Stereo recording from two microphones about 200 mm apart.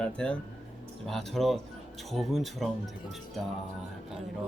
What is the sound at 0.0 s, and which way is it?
Speech, 5° left (ahead or behind).